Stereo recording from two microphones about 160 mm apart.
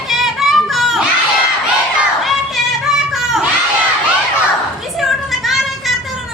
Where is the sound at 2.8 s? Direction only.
Centre (ahead or behind).